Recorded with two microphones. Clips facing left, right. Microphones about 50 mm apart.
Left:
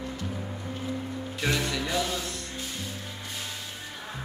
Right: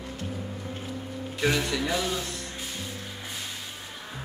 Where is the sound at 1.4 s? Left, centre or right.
Centre.